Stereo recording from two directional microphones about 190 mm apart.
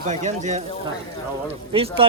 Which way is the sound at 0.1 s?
40° right (ahead or behind).